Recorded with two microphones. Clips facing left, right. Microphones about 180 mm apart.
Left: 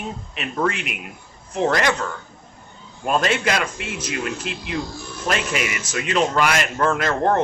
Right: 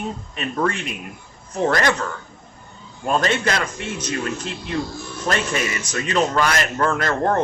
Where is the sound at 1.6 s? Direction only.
5° left (ahead or behind).